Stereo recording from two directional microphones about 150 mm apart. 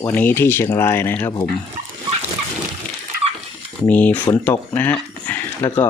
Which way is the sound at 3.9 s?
10° left (ahead or behind).